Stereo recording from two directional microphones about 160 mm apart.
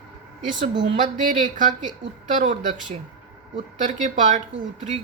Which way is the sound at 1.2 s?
55° right (ahead or behind).